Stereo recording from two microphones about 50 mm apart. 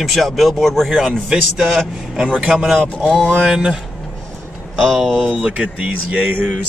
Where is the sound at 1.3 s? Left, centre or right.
Centre.